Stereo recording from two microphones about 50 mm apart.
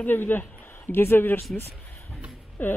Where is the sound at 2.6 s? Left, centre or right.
Left.